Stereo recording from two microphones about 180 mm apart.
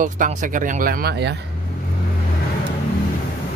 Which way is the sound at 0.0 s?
45° right (ahead or behind).